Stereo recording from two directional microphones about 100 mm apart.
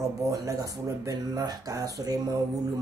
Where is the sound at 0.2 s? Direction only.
35° right (ahead or behind).